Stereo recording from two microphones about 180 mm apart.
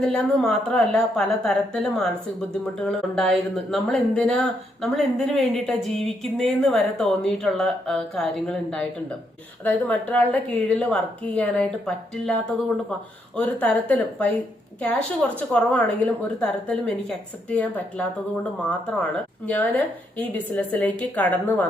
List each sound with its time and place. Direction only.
0.0 s a woman's voice: 5° left (ahead or behind)
15.4 s a woman's voice: 5° left (ahead or behind)
19.5 s a woman's voice: 10° left (ahead or behind)